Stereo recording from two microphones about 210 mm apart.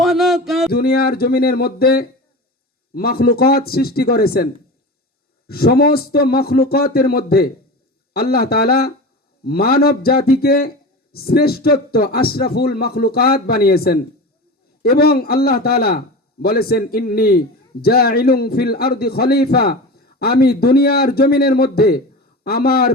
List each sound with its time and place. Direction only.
0.0 s a sound: centre (ahead or behind)
0.7 s speech: 45° left (ahead or behind)
5.5 s speech: 45° left (ahead or behind)